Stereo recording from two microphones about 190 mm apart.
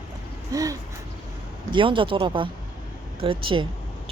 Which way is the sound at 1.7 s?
25° right (ahead or behind).